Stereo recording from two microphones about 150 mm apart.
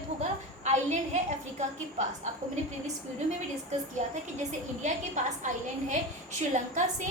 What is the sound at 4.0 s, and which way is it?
A woman's voice, 50° right (ahead or behind).